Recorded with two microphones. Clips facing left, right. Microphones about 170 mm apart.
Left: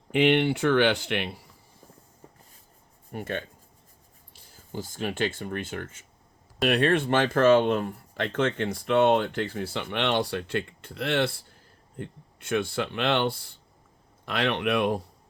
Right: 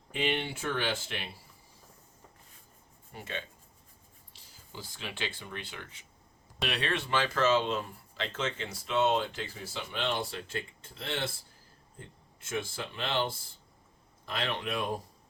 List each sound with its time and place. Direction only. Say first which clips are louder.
0.1 s speech: left 11 dB; 70° left (ahead or behind)
3.1 s speech: left 8 dB; 55° left (ahead or behind)
4.7 s speech: left 11 dB; 50° left (ahead or behind); by 15.0 s 70° left (ahead or behind)